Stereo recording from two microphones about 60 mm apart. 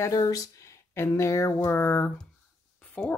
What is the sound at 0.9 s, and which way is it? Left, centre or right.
Speech, left.